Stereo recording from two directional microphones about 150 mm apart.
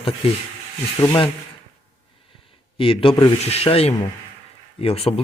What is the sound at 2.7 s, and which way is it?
A man's voice, 35° left (ahead or behind).